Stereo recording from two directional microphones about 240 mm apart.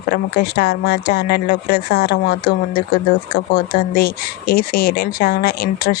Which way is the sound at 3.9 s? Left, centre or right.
Left.